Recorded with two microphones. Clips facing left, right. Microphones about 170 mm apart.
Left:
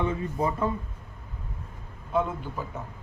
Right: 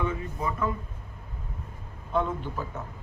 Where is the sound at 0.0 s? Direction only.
30° left (ahead or behind).